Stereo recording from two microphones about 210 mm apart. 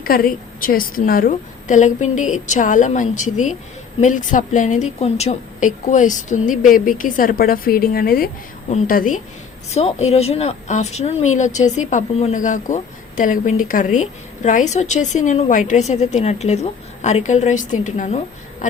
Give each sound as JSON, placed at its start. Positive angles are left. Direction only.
{"t": 0.0, "sound": "speech", "side_deg": 45}